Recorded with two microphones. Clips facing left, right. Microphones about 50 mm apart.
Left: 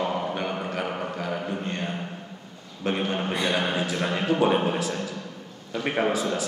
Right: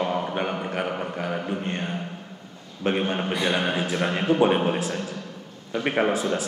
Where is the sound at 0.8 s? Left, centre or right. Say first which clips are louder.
Right 1 dB; centre.